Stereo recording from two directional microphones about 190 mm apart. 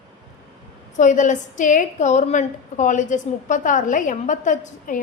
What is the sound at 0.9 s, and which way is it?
A woman's voice, 40° left (ahead or behind).